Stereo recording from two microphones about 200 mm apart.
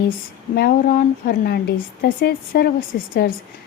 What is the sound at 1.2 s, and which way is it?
A woman's voice, 50° left (ahead or behind).